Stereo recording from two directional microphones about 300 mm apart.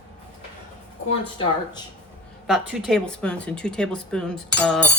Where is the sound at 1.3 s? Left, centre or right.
Centre.